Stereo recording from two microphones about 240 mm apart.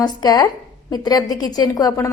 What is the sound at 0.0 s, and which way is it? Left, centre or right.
A woman's voice, centre.